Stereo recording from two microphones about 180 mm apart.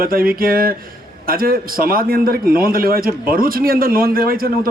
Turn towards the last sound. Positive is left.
turn(degrees=-55)  # may be behind; listen again after turning